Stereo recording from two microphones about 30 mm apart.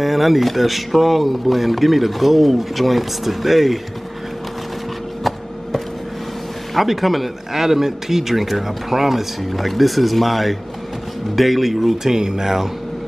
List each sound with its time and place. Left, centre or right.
0.0 s speech: centre
6.7 s speech: centre
12.0 s speech: centre